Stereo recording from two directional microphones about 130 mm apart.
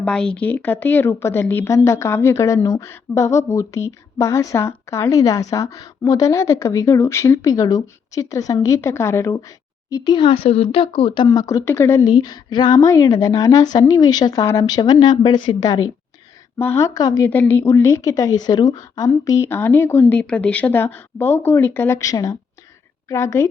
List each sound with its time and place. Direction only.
0.0 s a woman's voice: 10° left (ahead or behind)
9.9 s speech: 35° left (ahead or behind)
11.3 s a woman's voice: 25° left (ahead or behind)
12.1 s a woman's voice: 30° left (ahead or behind)
17.2 s a woman's voice: 15° left (ahead or behind)
20.1 s a woman's voice: 10° left (ahead or behind)